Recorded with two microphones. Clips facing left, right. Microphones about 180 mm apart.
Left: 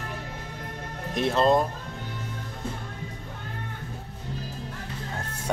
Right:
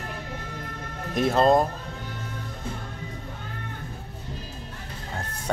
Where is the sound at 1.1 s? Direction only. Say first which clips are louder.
Right 2 dB; 45° right (ahead or behind).